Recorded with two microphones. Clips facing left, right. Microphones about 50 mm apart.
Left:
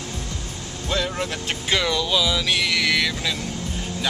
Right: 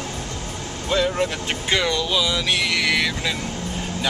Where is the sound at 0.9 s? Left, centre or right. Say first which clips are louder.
Right 4 dB; centre.